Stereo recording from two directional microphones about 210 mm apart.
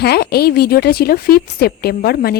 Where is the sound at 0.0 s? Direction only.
50° left (ahead or behind).